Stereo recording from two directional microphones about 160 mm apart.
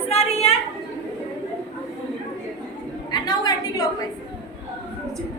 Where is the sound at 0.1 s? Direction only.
40° left (ahead or behind).